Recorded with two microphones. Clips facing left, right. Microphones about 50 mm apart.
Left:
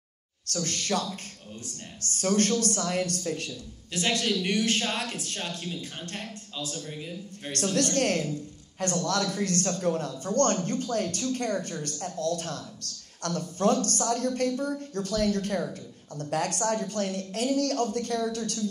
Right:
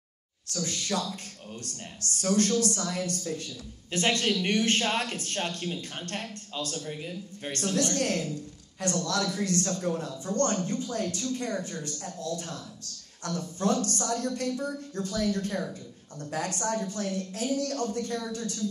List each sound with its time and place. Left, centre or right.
0.7 s speech: left
3.9 s speech: right
7.9 s a man's voice: left